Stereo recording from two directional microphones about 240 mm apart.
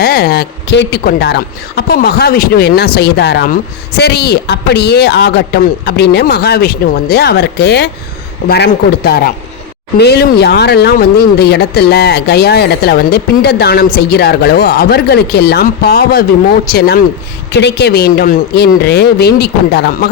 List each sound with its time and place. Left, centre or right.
0.0 s speech: left